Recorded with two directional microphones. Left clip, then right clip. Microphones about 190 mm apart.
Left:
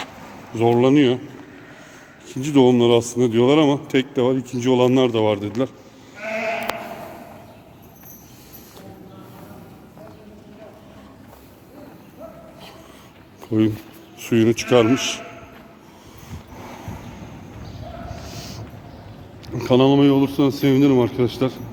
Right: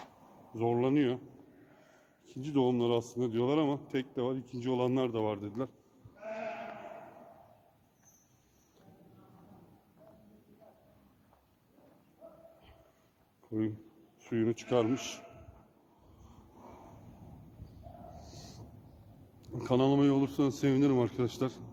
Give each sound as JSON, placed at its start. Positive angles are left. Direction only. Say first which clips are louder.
{"t": 0.5, "sound": "a man's voice", "louder": "left 14 dB", "side_deg": -5}
{"t": 2.2, "sound": "a man's voice", "louder": "left 15 dB", "side_deg": 0}
{"t": 13.5, "sound": "speech", "louder": "left 16 dB", "side_deg": 20}
{"t": 14.3, "sound": "a man's voice", "louder": "left 15 dB", "side_deg": 5}
{"t": 18.2, "sound": "a sound", "louder": "left 17 dB", "side_deg": -15}
{"t": 19.5, "sound": "a man's voice", "louder": "left 13 dB", "side_deg": -20}